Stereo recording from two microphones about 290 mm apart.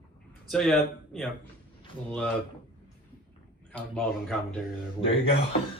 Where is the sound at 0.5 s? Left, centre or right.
Centre.